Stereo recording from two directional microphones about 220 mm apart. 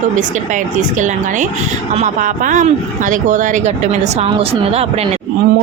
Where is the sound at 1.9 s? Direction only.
35° right (ahead or behind).